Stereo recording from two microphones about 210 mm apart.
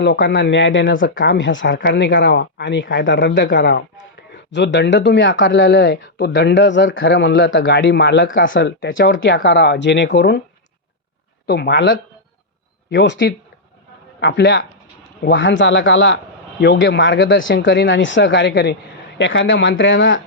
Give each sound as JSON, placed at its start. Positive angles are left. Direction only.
{"t": 0.0, "sound": "speech", "side_deg": 60}
{"t": 11.4, "sound": "speech", "side_deg": 50}